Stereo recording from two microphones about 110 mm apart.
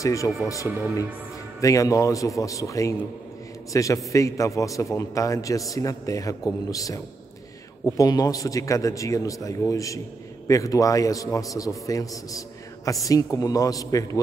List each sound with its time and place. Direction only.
0.0 s a man's voice: 30° left (ahead or behind)
1.6 s a man's voice: 30° left (ahead or behind)
8.0 s a man's voice: 35° left (ahead or behind)